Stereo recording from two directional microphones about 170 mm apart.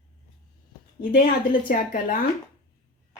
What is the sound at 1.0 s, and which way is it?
Speech, 65° left (ahead or behind).